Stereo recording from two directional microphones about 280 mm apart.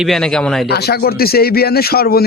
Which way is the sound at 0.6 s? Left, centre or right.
Left.